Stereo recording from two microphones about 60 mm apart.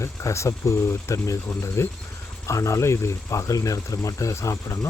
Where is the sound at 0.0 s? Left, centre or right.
Left.